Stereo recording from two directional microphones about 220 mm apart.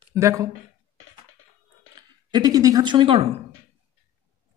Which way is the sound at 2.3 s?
15° right (ahead or behind).